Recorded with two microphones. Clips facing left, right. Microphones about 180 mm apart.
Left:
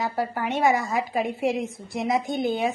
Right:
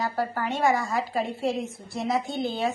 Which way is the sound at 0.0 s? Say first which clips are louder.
Left 1 dB; 20° left (ahead or behind).